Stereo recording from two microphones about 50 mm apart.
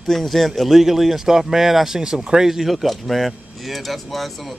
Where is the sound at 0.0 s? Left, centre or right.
Centre.